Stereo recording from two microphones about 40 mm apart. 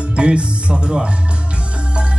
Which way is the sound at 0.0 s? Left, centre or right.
Right.